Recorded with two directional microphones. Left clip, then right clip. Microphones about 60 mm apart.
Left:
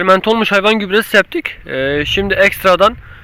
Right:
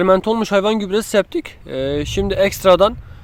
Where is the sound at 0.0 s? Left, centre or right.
Centre.